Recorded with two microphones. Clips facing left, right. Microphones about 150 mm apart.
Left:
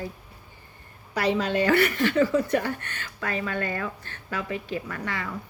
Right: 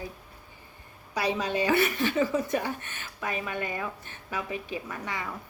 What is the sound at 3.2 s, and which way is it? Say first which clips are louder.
Speech: left 3 dB; 15° right (ahead or behind).